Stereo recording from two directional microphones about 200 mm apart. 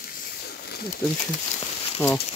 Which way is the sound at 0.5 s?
50° left (ahead or behind).